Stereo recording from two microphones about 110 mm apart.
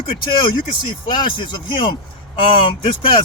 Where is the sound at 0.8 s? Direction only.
50° left (ahead or behind).